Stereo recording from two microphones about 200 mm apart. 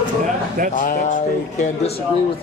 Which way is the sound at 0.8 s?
40° left (ahead or behind).